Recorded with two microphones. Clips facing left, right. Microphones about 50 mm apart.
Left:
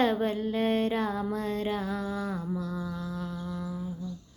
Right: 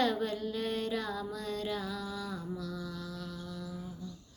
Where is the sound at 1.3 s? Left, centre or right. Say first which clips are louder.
Left 6 dB; left.